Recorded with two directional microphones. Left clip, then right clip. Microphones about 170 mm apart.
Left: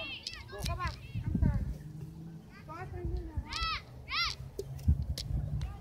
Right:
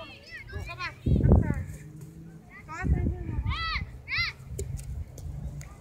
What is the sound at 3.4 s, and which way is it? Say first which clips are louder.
Children playing: right 4 dB; 45° left (ahead or behind).